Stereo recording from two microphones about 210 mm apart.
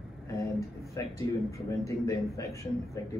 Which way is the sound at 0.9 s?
15° left (ahead or behind).